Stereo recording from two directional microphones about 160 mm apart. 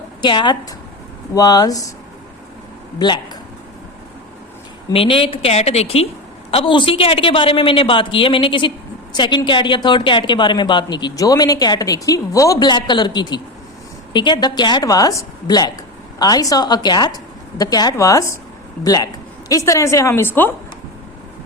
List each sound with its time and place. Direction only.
0.2 s speech: 30° left (ahead or behind)
4.9 s a woman's voice: 35° left (ahead or behind); by 20.5 s 15° left (ahead or behind)